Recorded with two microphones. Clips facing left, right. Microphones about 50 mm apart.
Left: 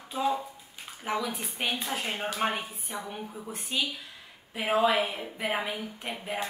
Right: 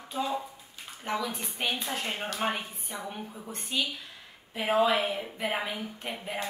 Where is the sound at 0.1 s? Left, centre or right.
Centre.